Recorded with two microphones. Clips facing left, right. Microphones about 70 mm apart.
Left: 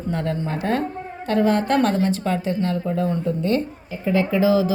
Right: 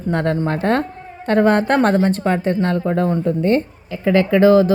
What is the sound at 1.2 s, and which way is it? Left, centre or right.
A woman's voice, right.